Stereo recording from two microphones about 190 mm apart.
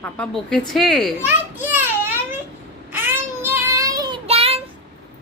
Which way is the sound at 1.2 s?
10° right (ahead or behind).